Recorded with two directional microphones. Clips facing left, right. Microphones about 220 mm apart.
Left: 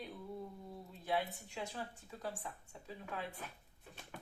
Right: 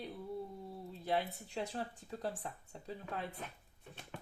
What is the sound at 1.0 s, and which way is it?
Speech, 35° right (ahead or behind).